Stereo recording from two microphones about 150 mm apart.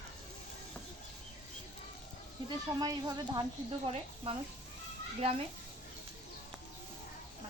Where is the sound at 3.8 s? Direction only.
40° right (ahead or behind).